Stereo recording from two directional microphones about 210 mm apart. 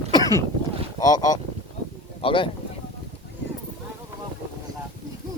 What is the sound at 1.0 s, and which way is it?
Speech, 20° left (ahead or behind).